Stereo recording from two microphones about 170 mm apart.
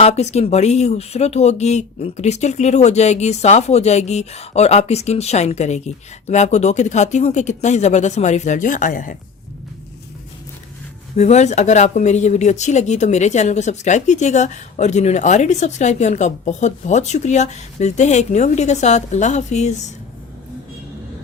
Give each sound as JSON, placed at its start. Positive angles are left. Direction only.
{"t": 0.0, "sound": "speech", "side_deg": 40}
{"t": 11.2, "sound": "a woman's voice", "side_deg": 40}